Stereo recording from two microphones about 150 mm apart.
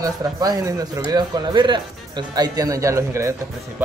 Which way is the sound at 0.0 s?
25° right (ahead or behind).